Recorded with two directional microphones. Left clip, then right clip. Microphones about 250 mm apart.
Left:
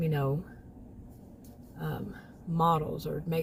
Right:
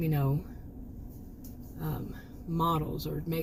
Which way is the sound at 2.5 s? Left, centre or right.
Centre.